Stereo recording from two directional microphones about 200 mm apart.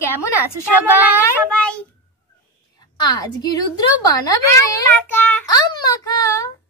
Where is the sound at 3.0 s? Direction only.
20° left (ahead or behind).